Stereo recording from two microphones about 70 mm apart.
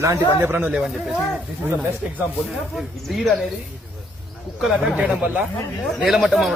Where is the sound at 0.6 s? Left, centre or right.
Centre.